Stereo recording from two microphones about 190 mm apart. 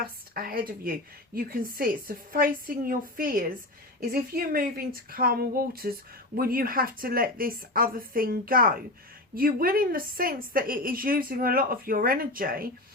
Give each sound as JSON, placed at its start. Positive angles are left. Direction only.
{"t": 0.3, "sound": "a woman's voice", "side_deg": -50}